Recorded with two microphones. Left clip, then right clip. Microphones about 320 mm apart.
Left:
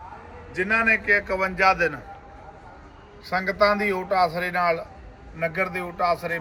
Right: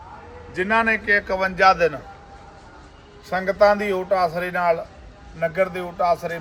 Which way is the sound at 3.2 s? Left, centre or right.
Centre.